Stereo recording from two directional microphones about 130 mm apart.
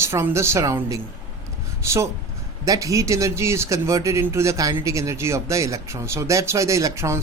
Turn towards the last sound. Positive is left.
turn(degrees=-20)  # may be behind; listen again after turning